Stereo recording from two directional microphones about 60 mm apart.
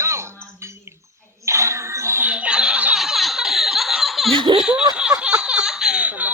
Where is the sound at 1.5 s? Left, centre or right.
Right.